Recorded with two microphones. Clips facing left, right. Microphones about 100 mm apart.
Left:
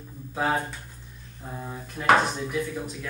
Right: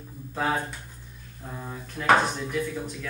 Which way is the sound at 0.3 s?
5° left (ahead or behind).